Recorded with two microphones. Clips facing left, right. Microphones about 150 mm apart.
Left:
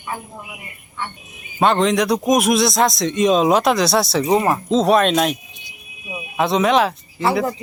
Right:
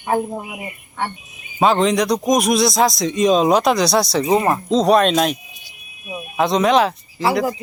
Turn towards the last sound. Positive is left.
turn(degrees=0)  # may be behind; listen again after turning